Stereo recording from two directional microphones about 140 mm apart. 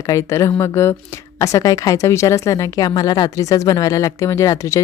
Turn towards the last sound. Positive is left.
turn(degrees=20)  # may be behind; listen again after turning